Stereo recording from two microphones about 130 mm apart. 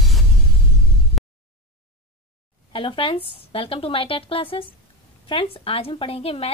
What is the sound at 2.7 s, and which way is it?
Speech, 45° left (ahead or behind).